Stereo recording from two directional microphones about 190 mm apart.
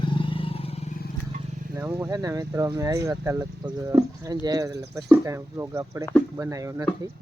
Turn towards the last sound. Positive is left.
turn(degrees=-15)  # may be behind; listen again after turning